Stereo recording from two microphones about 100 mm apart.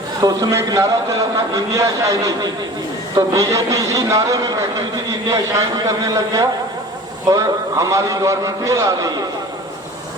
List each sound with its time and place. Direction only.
0.2 s speech: 35° right (ahead or behind)